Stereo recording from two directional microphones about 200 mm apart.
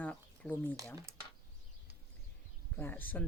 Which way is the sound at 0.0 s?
5° left (ahead or behind).